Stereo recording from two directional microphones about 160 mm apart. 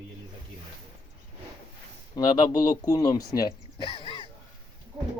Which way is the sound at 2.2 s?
25° left (ahead or behind).